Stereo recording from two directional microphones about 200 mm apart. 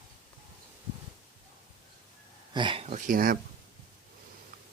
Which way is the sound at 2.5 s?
25° right (ahead or behind).